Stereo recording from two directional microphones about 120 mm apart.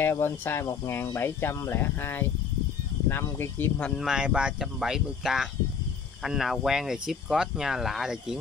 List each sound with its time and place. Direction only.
0.0 s speech: 20° left (ahead or behind)
3.9 s speech: 5° right (ahead or behind)